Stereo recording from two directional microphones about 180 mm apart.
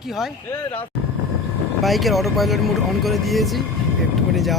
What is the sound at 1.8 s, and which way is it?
Speech, centre (ahead or behind).